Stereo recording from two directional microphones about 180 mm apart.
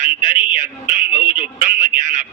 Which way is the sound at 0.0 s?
45° right (ahead or behind).